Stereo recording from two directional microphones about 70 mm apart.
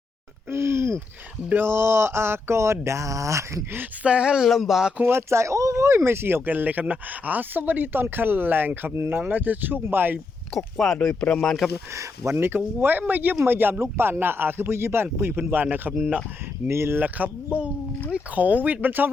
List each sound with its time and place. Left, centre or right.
0.5 s a sound: right
1.5 s speech: right
4.0 s speech: centre
5.0 s speech: right
10.5 s speech: centre
10.9 s speech: centre
11.9 s speech: right
16.0 s speech: centre
16.6 s speech: right
17.0 s speech: right